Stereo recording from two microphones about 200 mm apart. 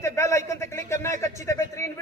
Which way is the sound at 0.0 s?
15° left (ahead or behind).